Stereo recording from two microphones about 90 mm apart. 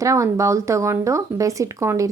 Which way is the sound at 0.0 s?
35° right (ahead or behind).